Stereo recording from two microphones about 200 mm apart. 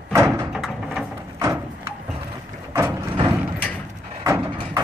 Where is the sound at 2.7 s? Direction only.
15° right (ahead or behind).